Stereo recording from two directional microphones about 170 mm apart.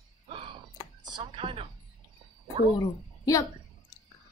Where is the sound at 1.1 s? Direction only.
30° right (ahead or behind).